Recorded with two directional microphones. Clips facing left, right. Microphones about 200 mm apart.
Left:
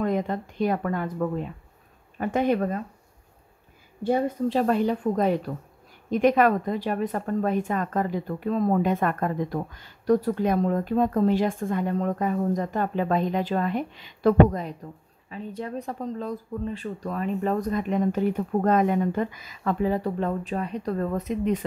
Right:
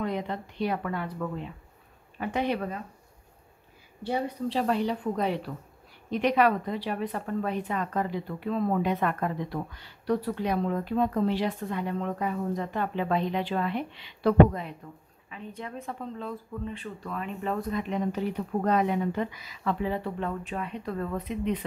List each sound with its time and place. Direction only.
0.0 s a woman's voice: 45° left (ahead or behind)
4.0 s a woman's voice: 50° left (ahead or behind)